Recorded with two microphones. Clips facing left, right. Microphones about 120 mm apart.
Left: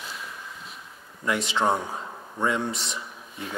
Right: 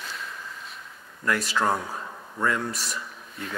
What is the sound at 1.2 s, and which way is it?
Speech, 20° left (ahead or behind).